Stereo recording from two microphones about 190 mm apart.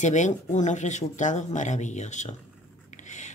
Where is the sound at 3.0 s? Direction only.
40° left (ahead or behind).